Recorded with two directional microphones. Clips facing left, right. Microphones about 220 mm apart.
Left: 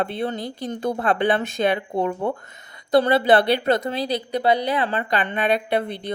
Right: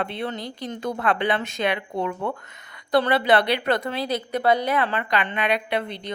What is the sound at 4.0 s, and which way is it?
A woman's voice, 35° left (ahead or behind).